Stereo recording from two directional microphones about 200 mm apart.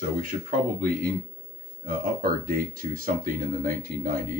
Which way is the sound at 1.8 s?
45° right (ahead or behind).